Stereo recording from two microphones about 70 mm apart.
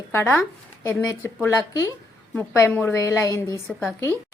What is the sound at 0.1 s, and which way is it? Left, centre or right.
Speech, left.